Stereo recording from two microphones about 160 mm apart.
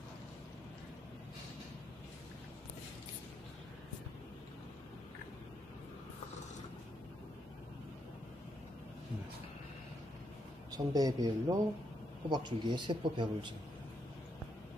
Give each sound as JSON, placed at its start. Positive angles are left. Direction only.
{"t": 10.7, "sound": "speech", "side_deg": -25}